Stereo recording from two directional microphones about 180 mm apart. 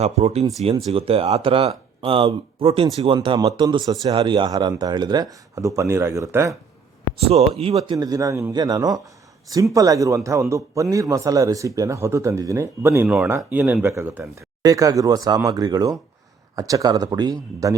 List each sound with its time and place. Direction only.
0.0 s speech: 35° right (ahead or behind); by 6.6 s 15° right (ahead or behind)
7.2 s speech: 35° right (ahead or behind)
7.7 s speech: 20° right (ahead or behind)